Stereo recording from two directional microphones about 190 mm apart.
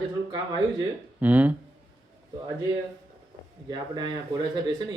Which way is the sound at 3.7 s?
20° right (ahead or behind).